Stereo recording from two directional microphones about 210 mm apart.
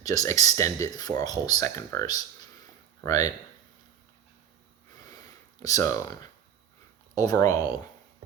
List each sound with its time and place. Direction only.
0.0 s speech: 15° left (ahead or behind)
5.6 s speech: 15° left (ahead or behind)
7.2 s speech: 15° left (ahead or behind)